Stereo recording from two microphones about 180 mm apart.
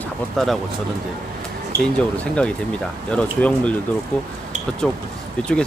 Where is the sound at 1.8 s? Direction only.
5° left (ahead or behind).